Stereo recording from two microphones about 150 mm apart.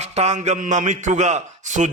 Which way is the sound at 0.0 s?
45° right (ahead or behind).